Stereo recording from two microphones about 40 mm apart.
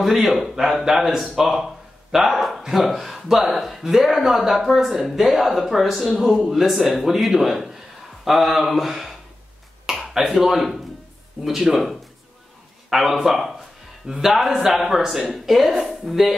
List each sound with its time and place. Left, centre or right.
0.0 s a man's voice: centre
15.3 s speech: centre